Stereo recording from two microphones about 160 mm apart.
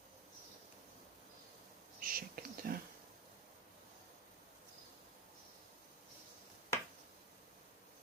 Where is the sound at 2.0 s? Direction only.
65° right (ahead or behind).